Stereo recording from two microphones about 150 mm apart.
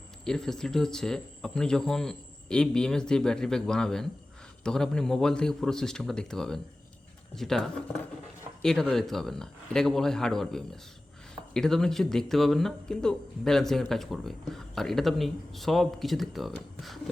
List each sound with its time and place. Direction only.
0.3 s speech: 5° left (ahead or behind)